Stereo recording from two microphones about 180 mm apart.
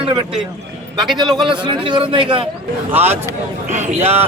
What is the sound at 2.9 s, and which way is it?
Speech, 10° right (ahead or behind).